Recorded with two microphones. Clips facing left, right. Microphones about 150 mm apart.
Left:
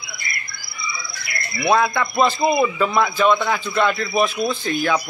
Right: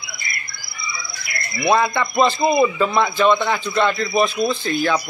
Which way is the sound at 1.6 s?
Centre (ahead or behind).